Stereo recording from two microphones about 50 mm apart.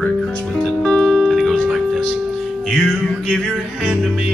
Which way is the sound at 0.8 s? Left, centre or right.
Centre.